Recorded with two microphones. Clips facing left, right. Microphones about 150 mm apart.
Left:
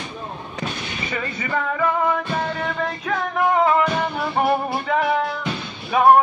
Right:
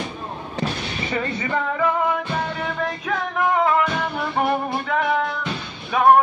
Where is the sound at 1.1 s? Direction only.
30° right (ahead or behind).